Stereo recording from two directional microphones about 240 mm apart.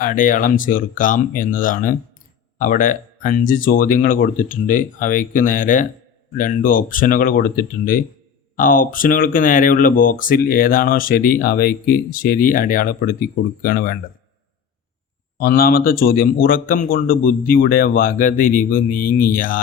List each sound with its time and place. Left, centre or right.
0.0 s speech: left
15.4 s speech: left